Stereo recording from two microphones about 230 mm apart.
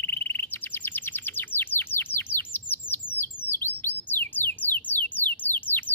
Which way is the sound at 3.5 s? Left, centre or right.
Centre.